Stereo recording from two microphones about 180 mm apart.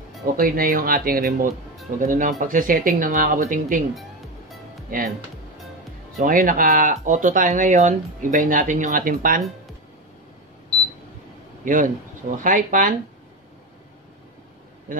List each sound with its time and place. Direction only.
0.4 s speech: 55° right (ahead or behind)
6.1 s speech: 50° right (ahead or behind)
11.6 s a man's voice: 50° right (ahead or behind)
14.9 s speech: 50° right (ahead or behind)